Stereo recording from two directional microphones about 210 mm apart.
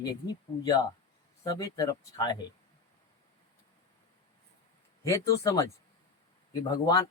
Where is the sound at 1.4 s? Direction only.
15° left (ahead or behind).